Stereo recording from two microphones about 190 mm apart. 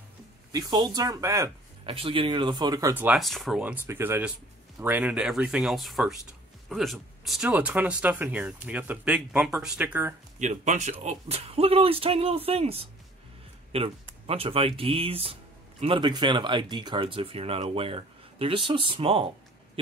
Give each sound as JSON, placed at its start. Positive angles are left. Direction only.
{"t": 0.5, "sound": "speech", "side_deg": -20}
{"t": 1.9, "sound": "speech", "side_deg": -30}
{"t": 3.2, "sound": "speech", "side_deg": 0}
{"t": 10.4, "sound": "speech", "side_deg": -40}